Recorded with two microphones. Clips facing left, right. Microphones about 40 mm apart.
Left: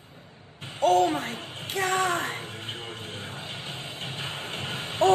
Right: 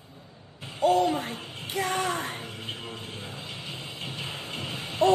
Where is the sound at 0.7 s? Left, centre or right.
Left.